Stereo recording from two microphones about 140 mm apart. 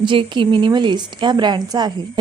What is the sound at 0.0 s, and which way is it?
A woman's voice, 35° right (ahead or behind).